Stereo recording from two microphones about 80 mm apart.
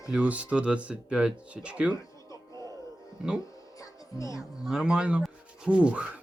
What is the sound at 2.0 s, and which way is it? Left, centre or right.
Music, left.